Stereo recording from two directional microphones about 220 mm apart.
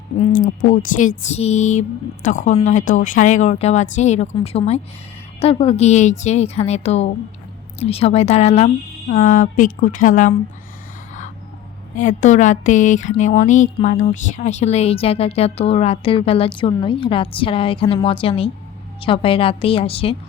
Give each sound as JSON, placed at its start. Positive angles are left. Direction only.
{"t": 0.2, "sound": "a woman's voice", "side_deg": 40}
{"t": 11.9, "sound": "a woman's voice", "side_deg": 35}